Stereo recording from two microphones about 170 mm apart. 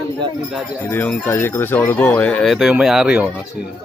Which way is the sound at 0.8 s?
10° left (ahead or behind).